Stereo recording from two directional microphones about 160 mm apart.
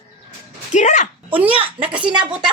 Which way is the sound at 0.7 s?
45° left (ahead or behind).